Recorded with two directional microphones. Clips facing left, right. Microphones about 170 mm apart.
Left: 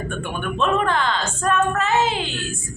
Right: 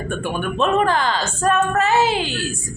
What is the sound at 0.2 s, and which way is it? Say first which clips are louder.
Speech: right 4 dB; 35° right (ahead or behind).